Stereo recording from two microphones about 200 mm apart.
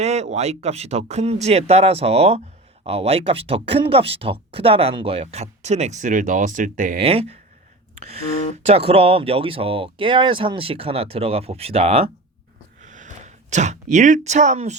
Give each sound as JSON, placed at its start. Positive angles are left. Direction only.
{"t": 0.0, "sound": "speech", "side_deg": -35}
{"t": 7.1, "sound": "speech", "side_deg": -30}